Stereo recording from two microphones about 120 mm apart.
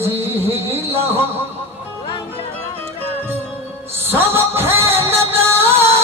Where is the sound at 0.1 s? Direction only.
20° right (ahead or behind).